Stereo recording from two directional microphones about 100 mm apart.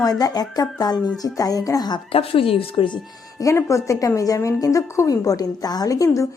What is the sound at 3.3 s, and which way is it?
A woman's voice, 30° left (ahead or behind).